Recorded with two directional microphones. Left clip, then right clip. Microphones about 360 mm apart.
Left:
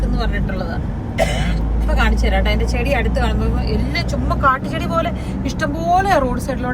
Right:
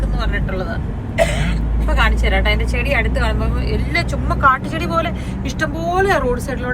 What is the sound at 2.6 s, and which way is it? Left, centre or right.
Speech, centre.